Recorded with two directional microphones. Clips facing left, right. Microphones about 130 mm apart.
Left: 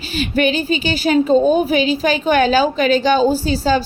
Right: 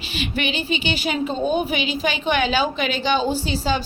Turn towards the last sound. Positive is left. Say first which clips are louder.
# left 6 dB
turn(degrees=40)  # may be behind; listen again after turning